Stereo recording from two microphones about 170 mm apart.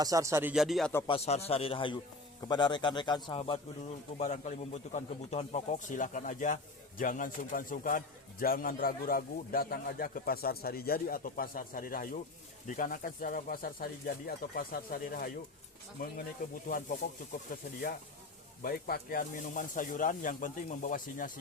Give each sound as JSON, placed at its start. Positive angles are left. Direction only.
{"t": 0.0, "sound": "speech", "side_deg": -20}
{"t": 0.5, "sound": "speech", "side_deg": 0}
{"t": 1.0, "sound": "a man's voice", "side_deg": 35}
{"t": 4.2, "sound": "a man's voice", "side_deg": 45}
{"t": 16.6, "sound": "a man's voice", "side_deg": 55}